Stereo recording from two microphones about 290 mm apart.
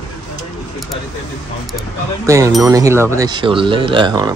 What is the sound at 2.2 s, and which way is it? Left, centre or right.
Speech, centre.